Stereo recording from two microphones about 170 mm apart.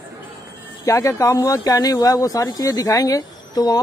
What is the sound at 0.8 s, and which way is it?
A man's voice, 15° left (ahead or behind).